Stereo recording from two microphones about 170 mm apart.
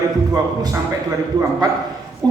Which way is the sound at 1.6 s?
25° right (ahead or behind).